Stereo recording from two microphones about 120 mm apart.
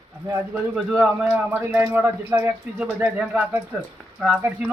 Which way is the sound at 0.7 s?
10° right (ahead or behind).